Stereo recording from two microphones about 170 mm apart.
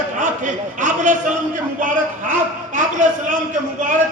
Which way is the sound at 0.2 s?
45° right (ahead or behind).